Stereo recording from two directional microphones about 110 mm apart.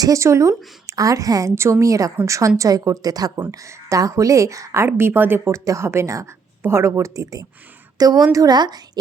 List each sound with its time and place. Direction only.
0.0 s a woman's voice: 30° right (ahead or behind)